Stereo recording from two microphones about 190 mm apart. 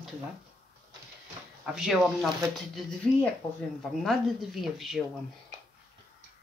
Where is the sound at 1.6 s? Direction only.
5° right (ahead or behind).